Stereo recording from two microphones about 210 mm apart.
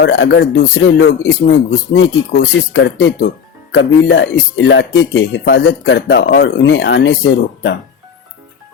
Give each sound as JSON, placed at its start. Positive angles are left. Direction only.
{"t": 0.0, "sound": "speech", "side_deg": 60}